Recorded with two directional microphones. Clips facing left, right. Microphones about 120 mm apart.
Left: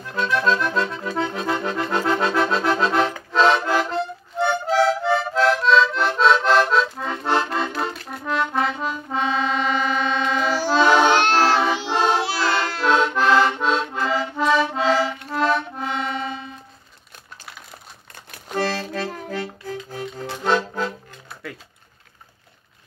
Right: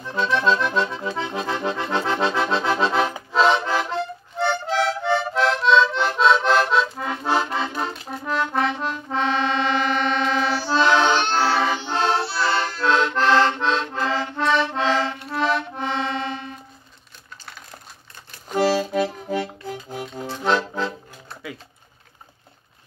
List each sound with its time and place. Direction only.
0.2 s accordion: centre (ahead or behind)
3.3 s music: centre (ahead or behind)
8.2 s accordion: centre (ahead or behind)
11.6 s music: 5° left (ahead or behind)
12.2 s music: 90° left
12.8 s accordion: 10° left (ahead or behind)
18.5 s accordion: 10° right (ahead or behind)
19.3 s music: 20° right (ahead or behind)
20.4 s accordion: 10° left (ahead or behind)